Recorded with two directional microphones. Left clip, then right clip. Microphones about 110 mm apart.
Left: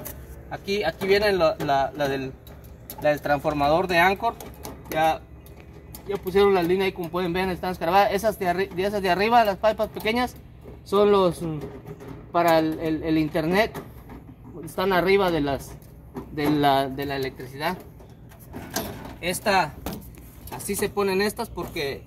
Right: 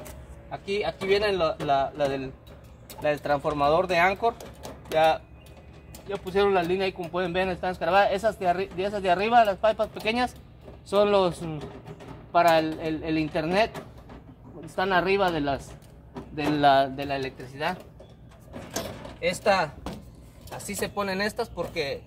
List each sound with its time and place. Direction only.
0.5 s speech: 5° right (ahead or behind)
3.0 s speech: 15° right (ahead or behind)
3.6 s speech: 35° right (ahead or behind); by 4.4 s 55° right (ahead or behind)
4.6 s typewriter: 35° right (ahead or behind)
6.0 s speech: 5° right (ahead or behind)
14.8 s speech: 5° left (ahead or behind)
17.2 s speech: 20° right (ahead or behind)
19.1 s speech: 30° right (ahead or behind)
20.4 s speech: 65° right (ahead or behind)